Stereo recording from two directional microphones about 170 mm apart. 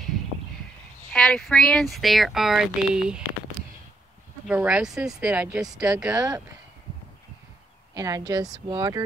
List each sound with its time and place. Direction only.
1.1 s speech: 5° left (ahead or behind)
4.5 s speech: 5° right (ahead or behind)
7.9 s speech: 20° right (ahead or behind)